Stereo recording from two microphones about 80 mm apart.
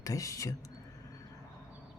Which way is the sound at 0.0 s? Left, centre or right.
Left.